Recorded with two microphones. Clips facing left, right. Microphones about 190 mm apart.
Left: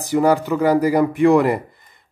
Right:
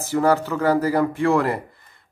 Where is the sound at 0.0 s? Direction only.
15° left (ahead or behind).